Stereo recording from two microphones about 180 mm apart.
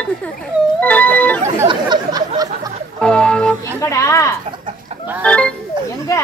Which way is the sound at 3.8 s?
15° left (ahead or behind).